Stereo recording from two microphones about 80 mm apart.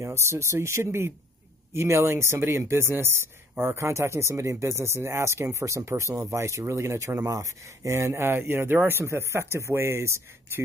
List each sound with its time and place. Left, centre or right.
0.0 s speech: right